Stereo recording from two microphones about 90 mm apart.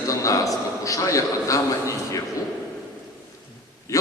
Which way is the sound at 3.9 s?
40° left (ahead or behind).